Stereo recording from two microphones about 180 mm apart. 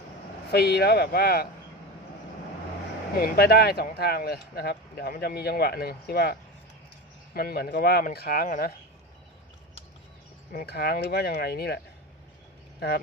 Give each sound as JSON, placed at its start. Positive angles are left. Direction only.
{"t": 0.5, "sound": "speech", "side_deg": 65}
{"t": 3.2, "sound": "speech", "side_deg": 60}
{"t": 7.3, "sound": "speech", "side_deg": 60}
{"t": 10.5, "sound": "speech", "side_deg": 55}